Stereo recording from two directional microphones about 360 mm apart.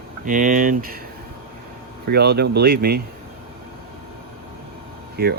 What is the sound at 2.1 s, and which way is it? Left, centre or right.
Speech, right.